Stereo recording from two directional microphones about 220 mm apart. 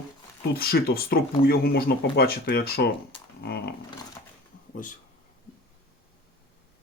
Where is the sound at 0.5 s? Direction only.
45° left (ahead or behind).